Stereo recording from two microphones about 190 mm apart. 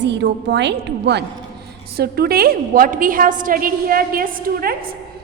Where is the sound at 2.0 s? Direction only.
55° right (ahead or behind).